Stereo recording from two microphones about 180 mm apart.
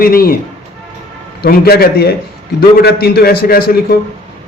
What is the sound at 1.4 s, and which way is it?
A man's voice, 60° left (ahead or behind).